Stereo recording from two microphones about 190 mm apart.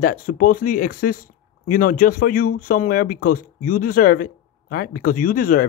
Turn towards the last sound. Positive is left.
turn(degrees=50)  # may be behind; listen again after turning